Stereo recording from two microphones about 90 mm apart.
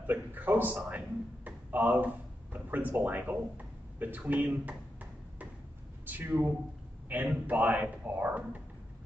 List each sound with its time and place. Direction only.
0.0 s a sound: 20° right (ahead or behind)
2.5 s speech: 20° right (ahead or behind)
6.0 s a man's voice: 20° right (ahead or behind)